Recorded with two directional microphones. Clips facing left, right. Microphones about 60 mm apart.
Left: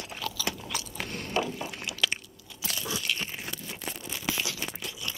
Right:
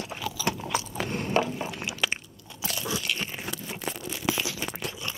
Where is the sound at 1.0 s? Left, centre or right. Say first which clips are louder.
Right 6 dB; right.